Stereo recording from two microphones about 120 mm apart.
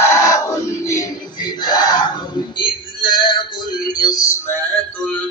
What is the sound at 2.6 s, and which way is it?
Male singing, 40° left (ahead or behind).